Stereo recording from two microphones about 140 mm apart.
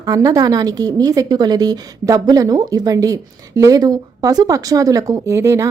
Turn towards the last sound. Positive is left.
turn(degrees=-20)  # may be behind; listen again after turning